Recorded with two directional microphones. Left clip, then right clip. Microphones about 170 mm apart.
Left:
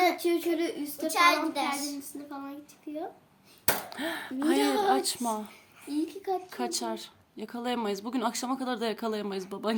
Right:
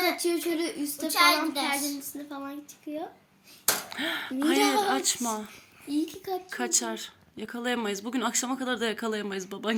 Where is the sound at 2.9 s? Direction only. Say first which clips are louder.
Right 2 dB; 75° right (ahead or behind).